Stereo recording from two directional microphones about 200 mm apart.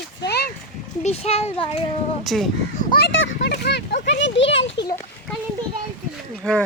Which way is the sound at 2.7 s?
50° left (ahead or behind).